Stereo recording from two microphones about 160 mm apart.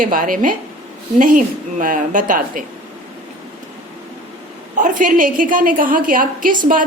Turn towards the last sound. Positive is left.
turn(degrees=-60)  # may be behind; listen again after turning